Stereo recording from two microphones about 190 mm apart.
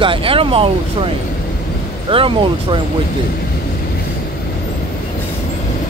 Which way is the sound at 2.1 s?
25° right (ahead or behind).